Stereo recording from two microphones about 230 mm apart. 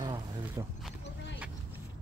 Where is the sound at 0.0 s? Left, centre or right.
Centre.